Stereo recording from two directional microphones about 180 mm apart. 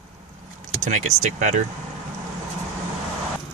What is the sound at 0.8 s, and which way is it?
Speech, 45° right (ahead or behind).